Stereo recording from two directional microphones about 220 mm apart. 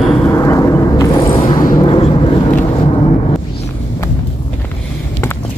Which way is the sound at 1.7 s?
25° left (ahead or behind).